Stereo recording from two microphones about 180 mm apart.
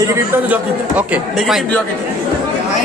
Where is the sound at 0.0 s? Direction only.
10° right (ahead or behind).